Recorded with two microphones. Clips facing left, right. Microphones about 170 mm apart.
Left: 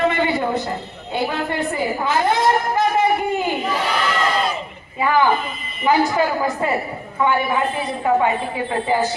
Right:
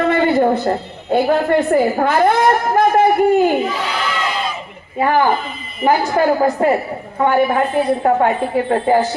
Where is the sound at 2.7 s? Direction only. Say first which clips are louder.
Right 5 dB; 55° right (ahead or behind).